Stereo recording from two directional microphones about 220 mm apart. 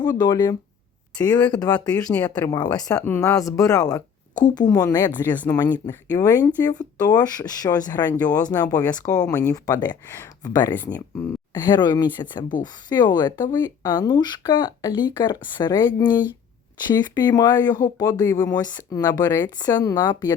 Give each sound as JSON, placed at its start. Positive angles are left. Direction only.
{"t": 0.0, "sound": "speech", "side_deg": 20}